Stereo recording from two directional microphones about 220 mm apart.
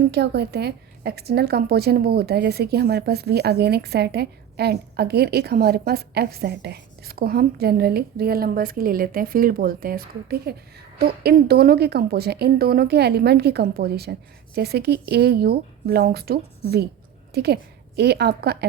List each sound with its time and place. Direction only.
0.1 s a woman's voice: 50° right (ahead or behind)